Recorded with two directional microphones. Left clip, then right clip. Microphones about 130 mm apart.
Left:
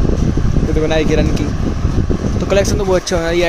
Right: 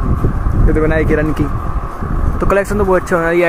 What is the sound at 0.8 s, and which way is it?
Speech, 25° left (ahead or behind).